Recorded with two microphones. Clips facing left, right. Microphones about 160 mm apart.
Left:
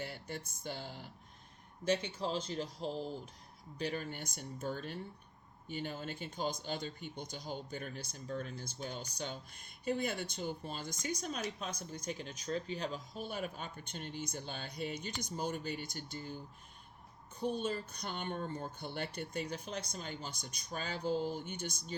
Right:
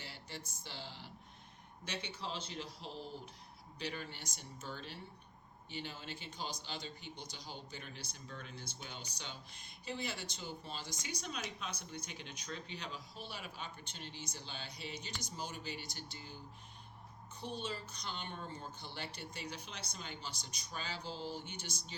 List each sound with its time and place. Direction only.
0.0 s speech: 50° left (ahead or behind)
17.4 s speech: 50° left (ahead or behind)